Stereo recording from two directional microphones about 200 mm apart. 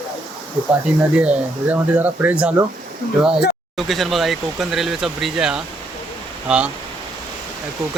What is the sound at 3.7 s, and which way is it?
Speech, centre (ahead or behind).